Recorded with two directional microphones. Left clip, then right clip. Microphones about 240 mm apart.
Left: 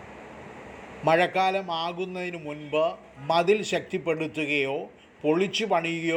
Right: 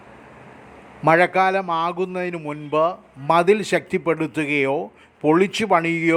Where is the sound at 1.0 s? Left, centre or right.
Right.